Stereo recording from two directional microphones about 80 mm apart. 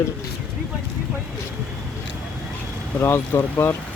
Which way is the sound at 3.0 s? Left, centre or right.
Left.